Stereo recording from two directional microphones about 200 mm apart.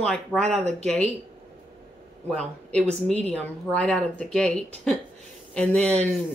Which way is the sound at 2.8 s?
30° right (ahead or behind).